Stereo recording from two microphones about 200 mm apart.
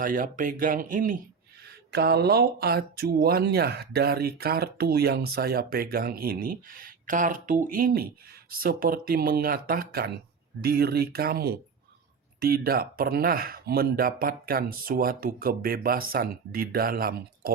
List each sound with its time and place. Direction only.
0.0 s speech: 40° right (ahead or behind)
1.6 s speech: 55° right (ahead or behind)